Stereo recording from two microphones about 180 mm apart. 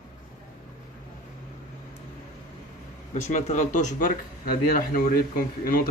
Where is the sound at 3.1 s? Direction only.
40° left (ahead or behind).